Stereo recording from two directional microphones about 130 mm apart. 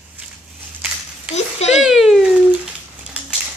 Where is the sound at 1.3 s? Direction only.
55° left (ahead or behind).